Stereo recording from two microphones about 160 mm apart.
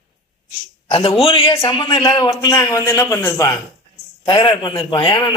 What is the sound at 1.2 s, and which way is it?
A man's voice, 35° left (ahead or behind).